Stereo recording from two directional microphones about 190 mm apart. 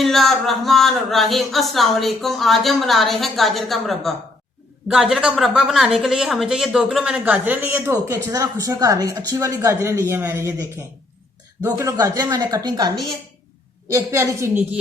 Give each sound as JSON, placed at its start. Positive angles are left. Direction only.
{"t": 0.0, "sound": "speech", "side_deg": 0}